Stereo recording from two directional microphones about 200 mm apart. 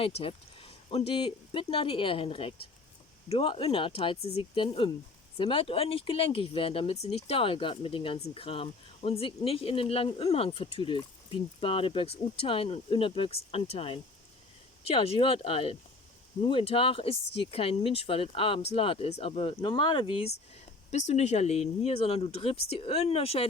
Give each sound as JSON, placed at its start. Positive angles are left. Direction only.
{"t": 0.0, "sound": "speech", "side_deg": 30}